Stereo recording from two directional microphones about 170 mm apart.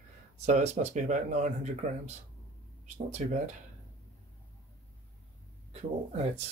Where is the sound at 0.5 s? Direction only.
45° right (ahead or behind).